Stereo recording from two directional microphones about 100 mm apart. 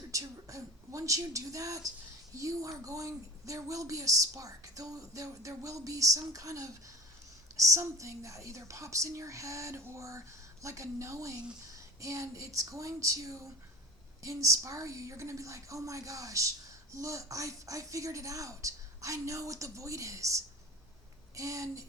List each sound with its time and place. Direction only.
0.1 s a woman's voice: 35° right (ahead or behind)